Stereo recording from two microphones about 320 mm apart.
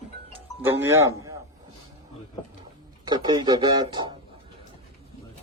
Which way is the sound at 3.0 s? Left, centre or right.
Centre.